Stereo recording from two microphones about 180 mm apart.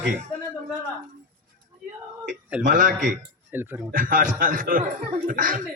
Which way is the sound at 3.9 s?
50° right (ahead or behind).